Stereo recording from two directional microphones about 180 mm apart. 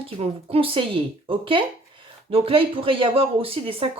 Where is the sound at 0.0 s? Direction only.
35° right (ahead or behind).